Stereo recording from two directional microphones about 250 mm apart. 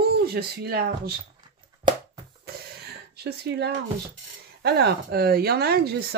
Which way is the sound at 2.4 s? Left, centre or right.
Right.